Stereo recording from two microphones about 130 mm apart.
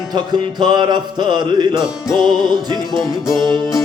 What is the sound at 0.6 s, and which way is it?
Music, 35° right (ahead or behind).